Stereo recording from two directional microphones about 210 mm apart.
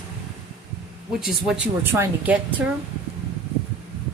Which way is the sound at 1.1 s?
Centre (ahead or behind).